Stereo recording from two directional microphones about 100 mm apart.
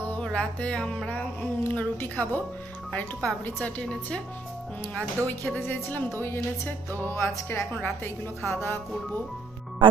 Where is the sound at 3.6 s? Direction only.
10° left (ahead or behind).